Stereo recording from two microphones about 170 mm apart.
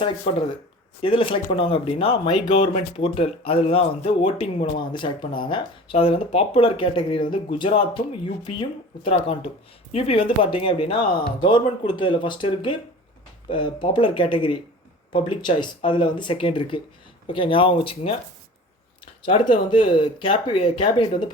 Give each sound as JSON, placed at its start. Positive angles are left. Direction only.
{"t": 1.0, "sound": "speech", "side_deg": 30}
{"t": 19.2, "sound": "speech", "side_deg": 30}